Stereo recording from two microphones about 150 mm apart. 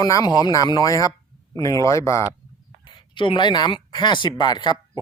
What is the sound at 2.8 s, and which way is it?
Speech, 30° left (ahead or behind).